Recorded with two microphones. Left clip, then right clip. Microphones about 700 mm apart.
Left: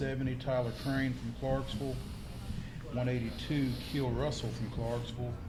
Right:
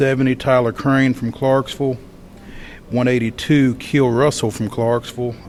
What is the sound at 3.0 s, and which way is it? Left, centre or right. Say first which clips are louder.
Speech: right 19 dB; right.